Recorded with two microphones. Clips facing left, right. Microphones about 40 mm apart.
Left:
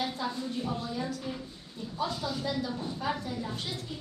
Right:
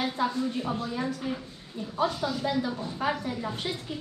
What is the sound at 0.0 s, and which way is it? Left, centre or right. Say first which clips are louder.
A woman's voice: right 5 dB; right.